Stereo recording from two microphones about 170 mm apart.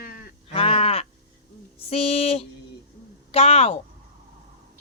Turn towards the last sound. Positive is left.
turn(degrees=35)  # may be behind; listen again after turning